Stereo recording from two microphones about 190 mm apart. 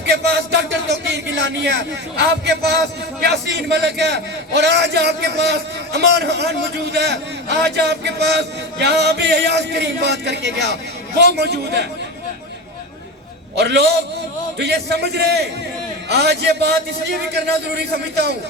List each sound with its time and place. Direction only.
0.0 s music: 65° right (ahead or behind)
3.2 s a man's voice: 60° right (ahead or behind)
13.6 s a man's voice: 60° right (ahead or behind)